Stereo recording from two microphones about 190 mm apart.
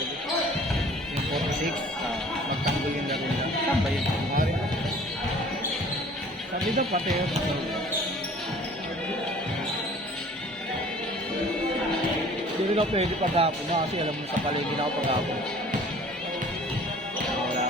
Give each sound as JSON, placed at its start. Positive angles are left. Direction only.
{"t": 6.7, "sound": "speech", "side_deg": -35}
{"t": 12.7, "sound": "speech", "side_deg": -30}